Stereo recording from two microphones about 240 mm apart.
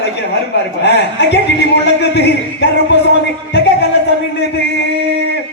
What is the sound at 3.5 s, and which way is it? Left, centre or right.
Music, left.